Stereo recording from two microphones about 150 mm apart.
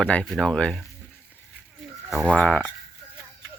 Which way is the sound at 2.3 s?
5° left (ahead or behind).